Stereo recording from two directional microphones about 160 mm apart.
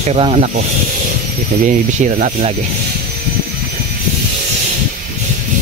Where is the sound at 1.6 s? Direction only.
50° right (ahead or behind).